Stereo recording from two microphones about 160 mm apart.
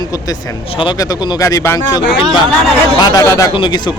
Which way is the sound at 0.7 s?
30° left (ahead or behind).